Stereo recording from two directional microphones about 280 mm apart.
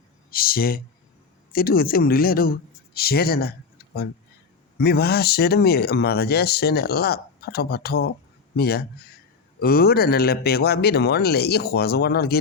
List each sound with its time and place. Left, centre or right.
0.3 s speech: left